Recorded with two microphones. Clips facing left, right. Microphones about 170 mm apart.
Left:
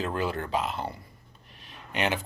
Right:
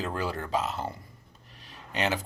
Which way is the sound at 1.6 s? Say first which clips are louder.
Left 1 dB; 40° right (ahead or behind).